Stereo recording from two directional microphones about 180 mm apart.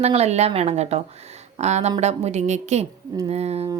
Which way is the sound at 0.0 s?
35° right (ahead or behind).